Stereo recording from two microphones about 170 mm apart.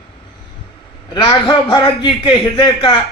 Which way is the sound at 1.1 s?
25° left (ahead or behind).